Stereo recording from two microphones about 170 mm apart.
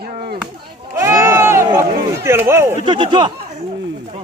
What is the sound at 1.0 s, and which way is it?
Speech, 15° right (ahead or behind).